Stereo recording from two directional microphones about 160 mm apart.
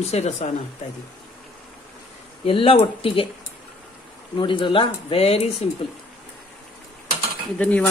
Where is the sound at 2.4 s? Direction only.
35° left (ahead or behind).